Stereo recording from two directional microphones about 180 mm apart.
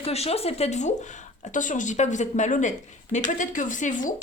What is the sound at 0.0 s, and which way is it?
Speech, 35° left (ahead or behind).